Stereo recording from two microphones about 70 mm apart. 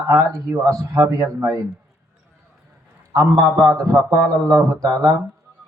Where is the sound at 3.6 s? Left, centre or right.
Right.